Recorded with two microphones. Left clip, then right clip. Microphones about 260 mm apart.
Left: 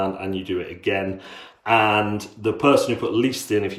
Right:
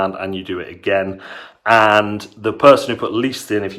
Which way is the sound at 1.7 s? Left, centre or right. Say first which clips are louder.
Right 6 dB; right.